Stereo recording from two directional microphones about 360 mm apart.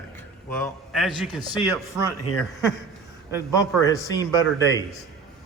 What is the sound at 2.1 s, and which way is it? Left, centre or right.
Speech, left.